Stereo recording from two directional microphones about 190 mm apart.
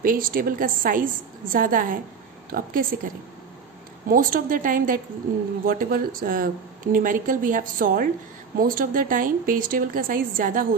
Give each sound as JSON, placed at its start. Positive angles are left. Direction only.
{"t": 0.0, "sound": "speech", "side_deg": -45}
{"t": 4.1, "sound": "speech", "side_deg": -45}